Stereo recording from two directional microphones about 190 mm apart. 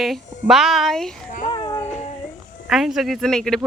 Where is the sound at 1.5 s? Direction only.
25° left (ahead or behind).